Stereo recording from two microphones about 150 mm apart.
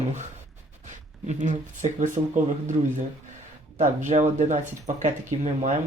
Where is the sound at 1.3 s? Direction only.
55° right (ahead or behind).